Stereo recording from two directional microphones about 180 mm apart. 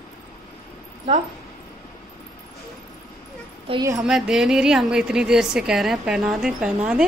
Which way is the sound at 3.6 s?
20° right (ahead or behind).